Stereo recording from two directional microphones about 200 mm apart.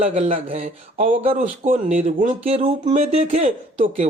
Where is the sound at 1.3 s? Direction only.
40° right (ahead or behind).